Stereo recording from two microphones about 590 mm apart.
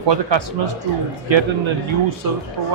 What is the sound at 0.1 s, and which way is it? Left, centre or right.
Speech, right.